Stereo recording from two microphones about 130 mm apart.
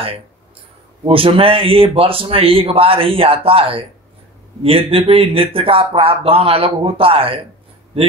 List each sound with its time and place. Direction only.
1.0 s speech: 45° right (ahead or behind)